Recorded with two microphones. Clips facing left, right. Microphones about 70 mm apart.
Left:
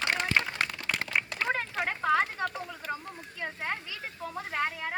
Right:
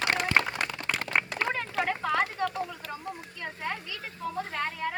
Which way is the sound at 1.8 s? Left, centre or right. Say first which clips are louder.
Left 3 dB; left.